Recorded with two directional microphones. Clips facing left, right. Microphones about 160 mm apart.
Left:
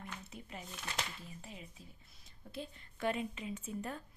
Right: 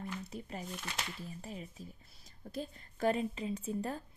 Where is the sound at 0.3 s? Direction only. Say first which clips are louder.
Right 6 dB; 40° right (ahead or behind).